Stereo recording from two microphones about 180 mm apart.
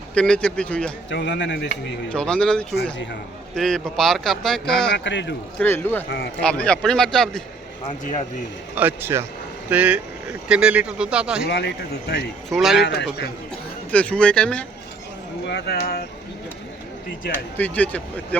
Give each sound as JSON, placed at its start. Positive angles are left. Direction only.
{"t": 0.1, "sound": "speech", "side_deg": 5}
{"t": 1.1, "sound": "speech", "side_deg": 75}
{"t": 2.1, "sound": "speech", "side_deg": 5}
{"t": 4.9, "sound": "a man's voice", "side_deg": 80}
{"t": 5.5, "sound": "speech", "side_deg": 10}
{"t": 8.7, "sound": "speech", "side_deg": -10}
{"t": 11.4, "sound": "speech", "side_deg": 70}
{"t": 12.5, "sound": "speech", "side_deg": 0}
{"t": 12.8, "sound": "speech", "side_deg": 75}
{"t": 13.9, "sound": "speech", "side_deg": 5}
{"t": 15.4, "sound": "speech", "side_deg": 65}
{"t": 17.6, "sound": "speech", "side_deg": 10}